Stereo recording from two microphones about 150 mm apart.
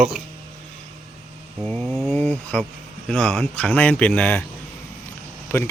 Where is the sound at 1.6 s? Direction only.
5° left (ahead or behind).